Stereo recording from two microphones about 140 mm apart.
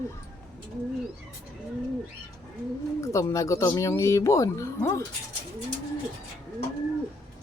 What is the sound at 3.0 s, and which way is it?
Speech, 20° left (ahead or behind).